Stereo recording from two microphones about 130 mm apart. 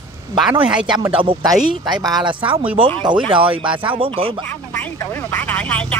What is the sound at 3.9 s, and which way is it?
Speech, 45° right (ahead or behind).